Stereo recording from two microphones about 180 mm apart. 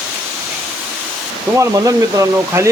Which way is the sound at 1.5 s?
20° right (ahead or behind).